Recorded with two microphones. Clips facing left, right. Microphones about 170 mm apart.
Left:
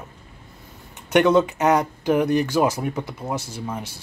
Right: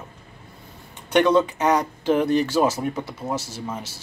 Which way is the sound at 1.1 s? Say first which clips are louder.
Left 1 dB; 20° left (ahead or behind).